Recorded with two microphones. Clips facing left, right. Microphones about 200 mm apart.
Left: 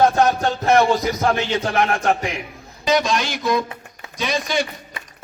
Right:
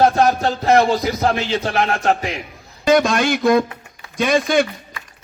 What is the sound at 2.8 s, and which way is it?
A man's voice, 55° right (ahead or behind).